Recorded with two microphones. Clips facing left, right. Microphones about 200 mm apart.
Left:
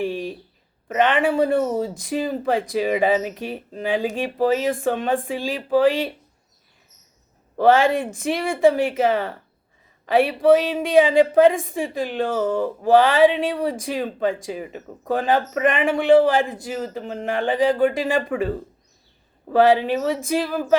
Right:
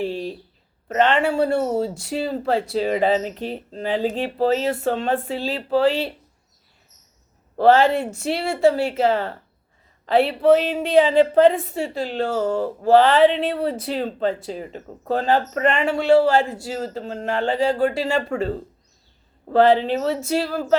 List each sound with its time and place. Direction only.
0.0 s a sound: 15° left (ahead or behind)
0.9 s speech: 15° left (ahead or behind)
7.6 s speech: 15° left (ahead or behind)
19.5 s speech: 10° left (ahead or behind)